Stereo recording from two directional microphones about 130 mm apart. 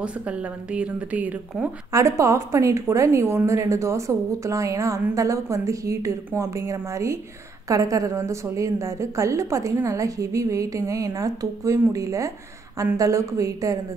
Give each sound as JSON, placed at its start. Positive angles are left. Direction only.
{"t": 0.0, "sound": "speech", "side_deg": -10}
{"t": 1.9, "sound": "a woman's voice", "side_deg": -25}